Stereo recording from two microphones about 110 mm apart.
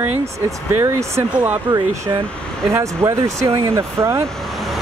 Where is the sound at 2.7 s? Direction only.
25° right (ahead or behind).